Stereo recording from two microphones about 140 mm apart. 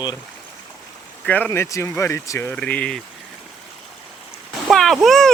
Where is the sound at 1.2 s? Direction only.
10° left (ahead or behind).